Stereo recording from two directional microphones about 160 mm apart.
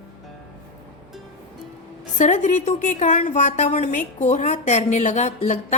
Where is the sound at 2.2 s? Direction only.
50° left (ahead or behind).